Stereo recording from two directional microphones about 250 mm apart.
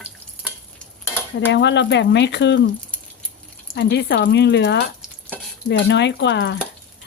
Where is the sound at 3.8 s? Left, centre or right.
Left.